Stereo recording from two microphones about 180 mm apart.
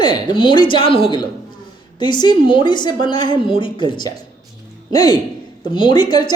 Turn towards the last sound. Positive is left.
turn(degrees=25)  # may be behind; listen again after turning